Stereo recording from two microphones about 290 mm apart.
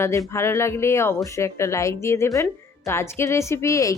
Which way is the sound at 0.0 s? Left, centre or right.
Centre.